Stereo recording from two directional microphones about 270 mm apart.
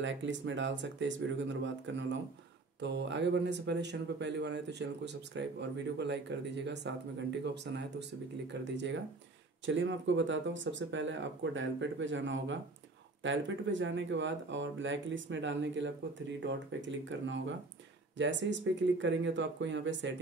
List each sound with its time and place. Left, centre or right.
0.0 s speech: right